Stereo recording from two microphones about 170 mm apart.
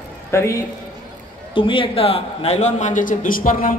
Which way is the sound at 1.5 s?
30° left (ahead or behind).